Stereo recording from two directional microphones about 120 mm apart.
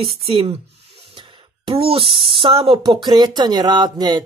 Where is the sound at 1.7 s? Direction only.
50° right (ahead or behind).